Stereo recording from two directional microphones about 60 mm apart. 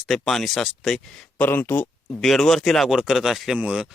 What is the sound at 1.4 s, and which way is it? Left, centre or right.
Speech, left.